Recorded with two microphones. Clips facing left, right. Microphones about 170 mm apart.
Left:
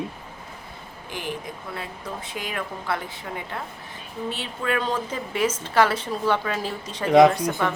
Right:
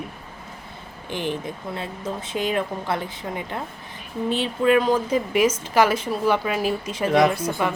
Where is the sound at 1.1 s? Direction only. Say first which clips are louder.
Right 5 dB; 25° right (ahead or behind).